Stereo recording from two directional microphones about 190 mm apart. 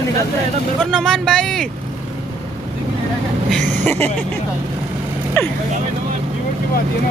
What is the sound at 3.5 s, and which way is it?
Speech, 10° left (ahead or behind).